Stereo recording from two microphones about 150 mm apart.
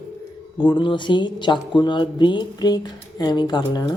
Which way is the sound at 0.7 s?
35° left (ahead or behind).